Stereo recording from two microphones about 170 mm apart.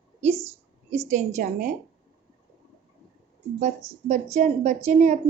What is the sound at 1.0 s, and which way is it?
Speech, 45° right (ahead or behind).